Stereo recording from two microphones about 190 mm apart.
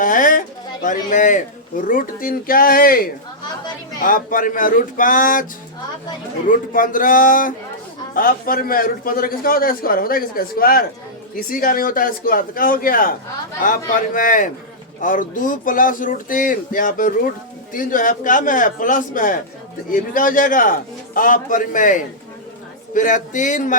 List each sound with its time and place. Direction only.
0.0 s a man's voice: 45° left (ahead or behind)
6.5 s a man's voice: 45° left (ahead or behind)